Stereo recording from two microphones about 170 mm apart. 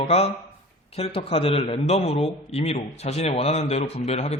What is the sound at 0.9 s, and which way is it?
A man's voice, 35° left (ahead or behind).